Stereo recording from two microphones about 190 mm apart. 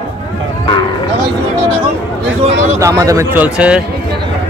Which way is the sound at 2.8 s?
20° right (ahead or behind).